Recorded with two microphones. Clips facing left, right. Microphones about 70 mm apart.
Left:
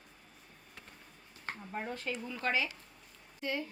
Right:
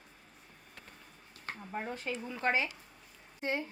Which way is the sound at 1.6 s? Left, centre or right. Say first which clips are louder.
Right 1 dB; centre.